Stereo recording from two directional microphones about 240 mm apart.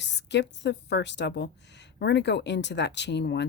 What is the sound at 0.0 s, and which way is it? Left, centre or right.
A woman's voice, left.